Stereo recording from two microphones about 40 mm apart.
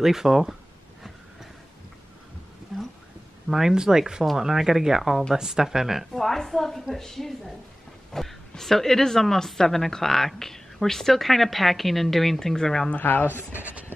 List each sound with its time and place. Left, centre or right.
0.0 s speech: centre
2.7 s a sound: centre
3.4 s speech: centre
3.7 s speech: centre
6.1 s a woman's voice: centre
13.0 s speech: left
13.6 s a sound: right